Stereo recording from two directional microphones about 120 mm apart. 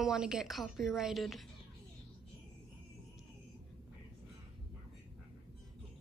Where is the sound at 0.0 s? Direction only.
5° right (ahead or behind).